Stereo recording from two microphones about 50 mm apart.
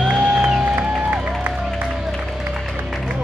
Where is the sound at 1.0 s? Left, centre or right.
Right.